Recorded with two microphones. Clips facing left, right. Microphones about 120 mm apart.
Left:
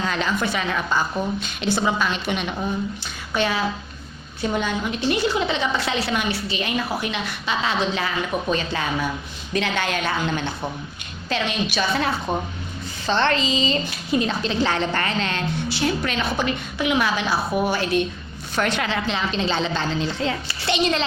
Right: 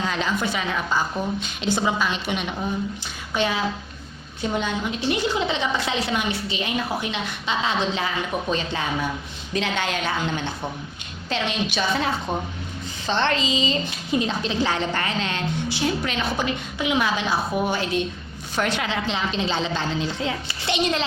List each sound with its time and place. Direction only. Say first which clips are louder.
0.0 s a woman's voice: left 1 dB; 15° right (ahead or behind)
5.1 s a woman's voice: left 2 dB; 20° right (ahead or behind)
12.3 s speech: left 2 dB; 15° left (ahead or behind)
13.1 s a woman's voice: left 2 dB; 15° right (ahead or behind)
18.5 s a woman's voice: left 1 dB; 15° right (ahead or behind)